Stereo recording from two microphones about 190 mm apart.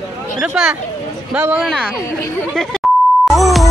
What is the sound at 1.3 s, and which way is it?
Speech, 5° right (ahead or behind).